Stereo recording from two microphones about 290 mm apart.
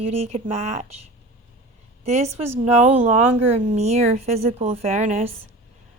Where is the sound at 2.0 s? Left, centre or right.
Right.